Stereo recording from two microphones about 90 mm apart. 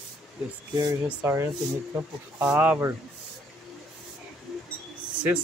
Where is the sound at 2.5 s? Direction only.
20° right (ahead or behind).